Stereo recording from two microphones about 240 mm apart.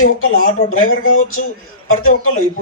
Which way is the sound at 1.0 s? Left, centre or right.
Left.